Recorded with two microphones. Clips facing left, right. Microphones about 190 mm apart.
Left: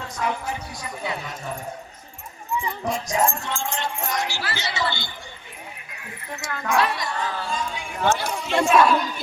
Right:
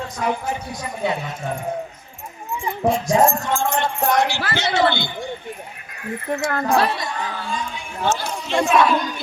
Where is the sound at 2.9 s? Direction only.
35° right (ahead or behind); by 6.7 s 60° right (ahead or behind).